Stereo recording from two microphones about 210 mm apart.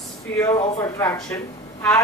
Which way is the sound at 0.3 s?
15° left (ahead or behind).